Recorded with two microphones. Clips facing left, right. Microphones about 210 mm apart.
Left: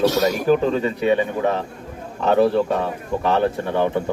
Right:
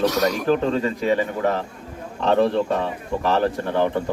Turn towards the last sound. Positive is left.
turn(degrees=15)  # may be behind; listen again after turning